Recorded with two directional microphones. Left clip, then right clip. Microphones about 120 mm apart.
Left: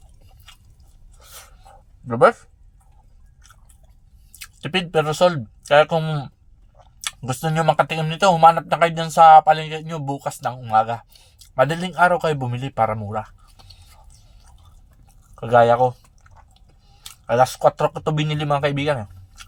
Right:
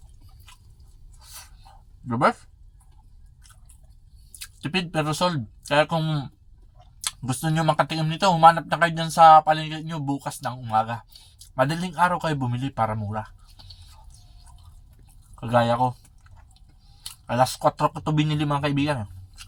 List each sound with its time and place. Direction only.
4.4 s a man's voice: 25° left (ahead or behind)
15.4 s speech: 20° left (ahead or behind)
17.2 s speech: 25° left (ahead or behind)